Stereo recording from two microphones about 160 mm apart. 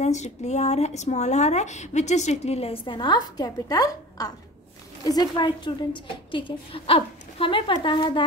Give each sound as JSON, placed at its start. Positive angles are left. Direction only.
{"t": 0.0, "sound": "a woman's voice", "side_deg": 45}